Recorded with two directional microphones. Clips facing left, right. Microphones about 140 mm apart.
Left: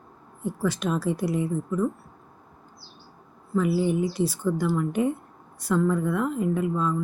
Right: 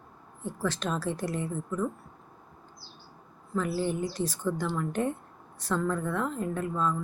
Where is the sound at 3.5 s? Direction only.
10° left (ahead or behind).